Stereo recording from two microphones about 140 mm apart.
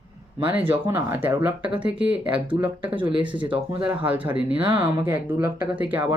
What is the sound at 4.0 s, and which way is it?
Speech, 10° right (ahead or behind).